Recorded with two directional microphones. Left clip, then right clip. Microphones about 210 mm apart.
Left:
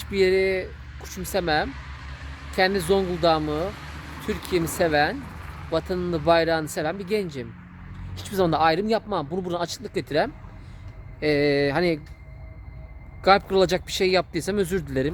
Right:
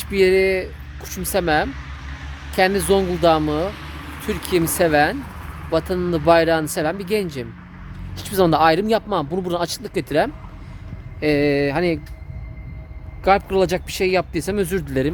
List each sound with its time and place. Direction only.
0.0 s speech: 5° right (ahead or behind)
1.7 s vehicle: 55° left (ahead or behind)
2.5 s speech: 5° right (ahead or behind)
3.7 s vehicle: 60° left (ahead or behind)
4.3 s speech: 5° right (ahead or behind); by 11.9 s 15° left (ahead or behind)
13.2 s speech: 20° left (ahead or behind); by 15.1 s centre (ahead or behind)